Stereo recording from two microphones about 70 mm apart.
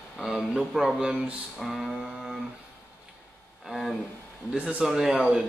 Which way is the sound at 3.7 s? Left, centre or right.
Centre.